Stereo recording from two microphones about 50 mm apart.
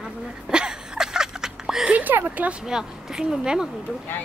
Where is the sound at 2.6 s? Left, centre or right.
Centre.